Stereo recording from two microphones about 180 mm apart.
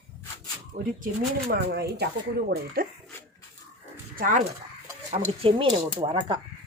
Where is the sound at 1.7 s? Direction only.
60° right (ahead or behind).